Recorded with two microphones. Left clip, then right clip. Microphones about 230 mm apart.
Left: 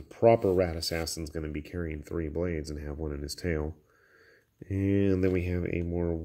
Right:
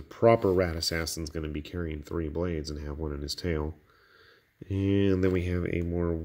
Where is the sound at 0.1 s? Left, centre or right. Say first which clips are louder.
Even; centre.